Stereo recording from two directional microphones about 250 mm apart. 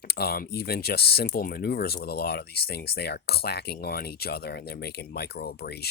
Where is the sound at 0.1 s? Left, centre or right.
Left.